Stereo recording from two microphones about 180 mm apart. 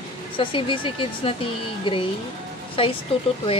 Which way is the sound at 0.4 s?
30° left (ahead or behind).